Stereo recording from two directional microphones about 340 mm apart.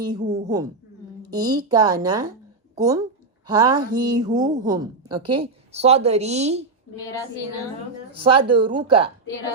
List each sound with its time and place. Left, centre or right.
0.0 s a woman's voice: centre
8.1 s a woman's voice: centre